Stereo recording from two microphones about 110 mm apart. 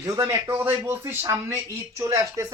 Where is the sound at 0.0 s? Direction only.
25° right (ahead or behind).